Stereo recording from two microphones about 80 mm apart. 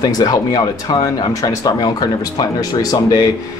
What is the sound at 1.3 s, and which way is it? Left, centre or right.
Speech, left.